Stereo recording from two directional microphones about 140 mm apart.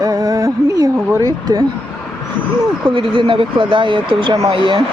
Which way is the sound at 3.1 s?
40° right (ahead or behind).